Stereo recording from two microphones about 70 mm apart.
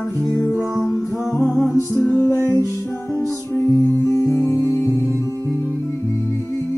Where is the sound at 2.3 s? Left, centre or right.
Left.